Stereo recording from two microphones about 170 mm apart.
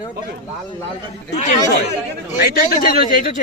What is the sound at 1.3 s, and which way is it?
Speech, 45° left (ahead or behind).